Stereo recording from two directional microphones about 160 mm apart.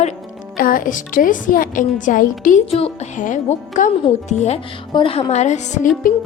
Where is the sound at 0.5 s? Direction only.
60° left (ahead or behind).